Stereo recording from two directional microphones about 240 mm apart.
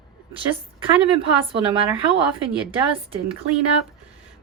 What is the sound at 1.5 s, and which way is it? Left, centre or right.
Speech, right.